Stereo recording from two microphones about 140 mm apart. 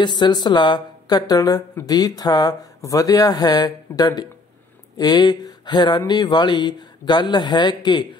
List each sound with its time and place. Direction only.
0.0 s speech: 30° left (ahead or behind)